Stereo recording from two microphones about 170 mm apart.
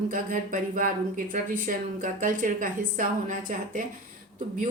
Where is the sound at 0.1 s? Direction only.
55° right (ahead or behind).